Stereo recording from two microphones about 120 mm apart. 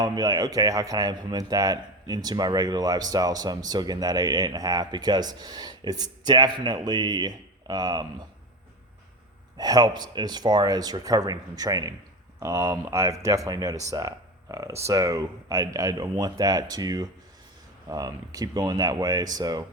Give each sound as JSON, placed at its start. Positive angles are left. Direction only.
{"t": 0.0, "sound": "speech", "side_deg": -35}
{"t": 9.6, "sound": "speech", "side_deg": -30}